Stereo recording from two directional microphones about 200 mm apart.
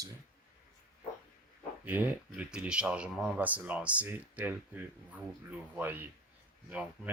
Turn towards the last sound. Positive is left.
turn(degrees=-5)  # may be behind; listen again after turning